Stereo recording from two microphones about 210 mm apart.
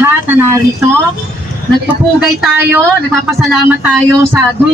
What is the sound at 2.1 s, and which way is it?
A man's voice, 5° right (ahead or behind).